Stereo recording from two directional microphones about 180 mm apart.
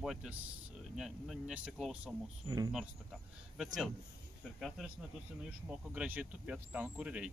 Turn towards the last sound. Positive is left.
turn(degrees=-5)  # may be behind; listen again after turning